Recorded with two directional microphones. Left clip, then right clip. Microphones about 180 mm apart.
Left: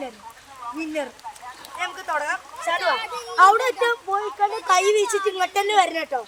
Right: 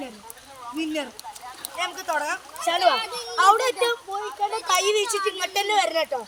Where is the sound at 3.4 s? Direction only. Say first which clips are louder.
Left 3 dB; 15° left (ahead or behind).